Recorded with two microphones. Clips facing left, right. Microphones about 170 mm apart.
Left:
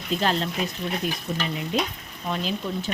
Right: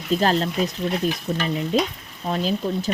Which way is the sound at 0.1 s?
40° right (ahead or behind).